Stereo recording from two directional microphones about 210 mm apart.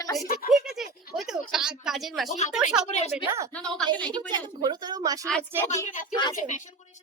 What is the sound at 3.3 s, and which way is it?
Speech, 15° right (ahead or behind).